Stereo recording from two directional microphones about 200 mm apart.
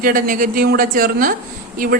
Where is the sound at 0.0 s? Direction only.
40° right (ahead or behind).